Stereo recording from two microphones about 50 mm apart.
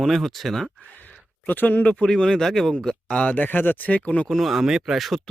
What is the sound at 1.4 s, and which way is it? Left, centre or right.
Speech, left.